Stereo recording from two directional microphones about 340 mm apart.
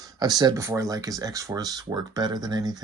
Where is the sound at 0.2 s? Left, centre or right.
Centre.